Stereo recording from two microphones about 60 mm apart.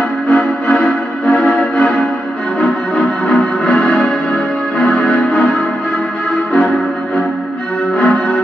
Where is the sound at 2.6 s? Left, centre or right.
Left.